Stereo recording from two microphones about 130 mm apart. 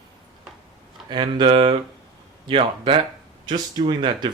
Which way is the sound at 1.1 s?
35° right (ahead or behind).